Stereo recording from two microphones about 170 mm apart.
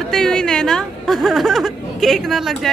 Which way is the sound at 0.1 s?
5° left (ahead or behind).